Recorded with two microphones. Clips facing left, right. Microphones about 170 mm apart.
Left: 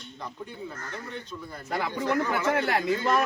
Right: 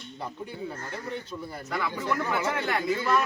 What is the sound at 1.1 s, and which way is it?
Speech, 10° right (ahead or behind).